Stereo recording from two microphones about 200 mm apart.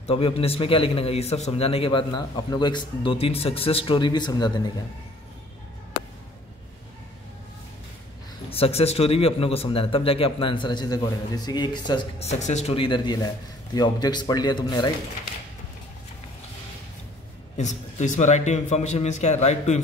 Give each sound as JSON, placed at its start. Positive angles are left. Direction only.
{"t": 0.0, "sound": "a man's voice", "side_deg": 30}
{"t": 8.5, "sound": "a man's voice", "side_deg": 30}
{"t": 17.6, "sound": "a man's voice", "side_deg": 35}